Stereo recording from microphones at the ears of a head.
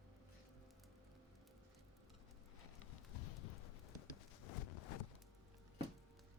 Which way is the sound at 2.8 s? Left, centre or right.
Left.